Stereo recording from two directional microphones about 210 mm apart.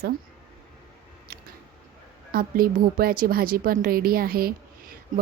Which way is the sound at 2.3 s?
45° right (ahead or behind).